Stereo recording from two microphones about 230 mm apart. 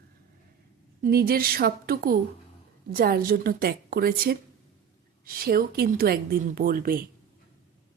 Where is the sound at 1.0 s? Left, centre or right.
Right.